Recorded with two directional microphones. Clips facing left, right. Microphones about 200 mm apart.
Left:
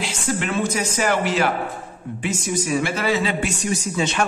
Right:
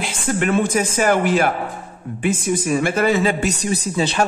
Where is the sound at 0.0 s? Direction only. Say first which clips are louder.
Right 4 dB; 50° right (ahead or behind).